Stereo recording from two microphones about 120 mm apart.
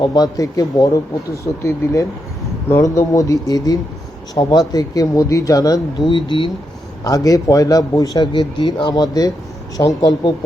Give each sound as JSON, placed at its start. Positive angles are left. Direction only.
{"t": 0.0, "sound": "a man's voice", "side_deg": 30}
{"t": 7.0, "sound": "a man's voice", "side_deg": 30}